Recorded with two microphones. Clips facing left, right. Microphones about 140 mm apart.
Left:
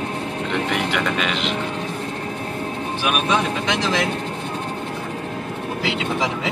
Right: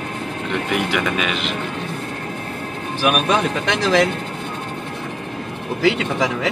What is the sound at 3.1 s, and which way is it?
Speech, 55° right (ahead or behind).